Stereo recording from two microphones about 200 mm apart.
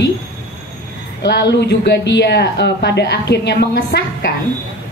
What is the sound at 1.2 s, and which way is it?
A woman's voice, 55° left (ahead or behind).